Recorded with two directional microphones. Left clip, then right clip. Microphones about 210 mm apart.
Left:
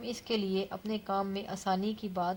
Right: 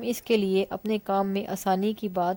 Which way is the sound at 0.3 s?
45° right (ahead or behind).